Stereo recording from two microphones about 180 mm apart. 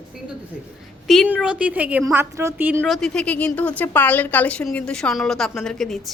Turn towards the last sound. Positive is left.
turn(degrees=0)  # may be behind; listen again after turning